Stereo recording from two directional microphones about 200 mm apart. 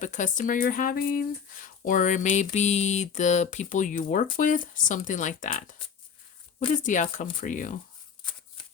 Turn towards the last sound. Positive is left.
turn(degrees=40)  # may be behind; listen again after turning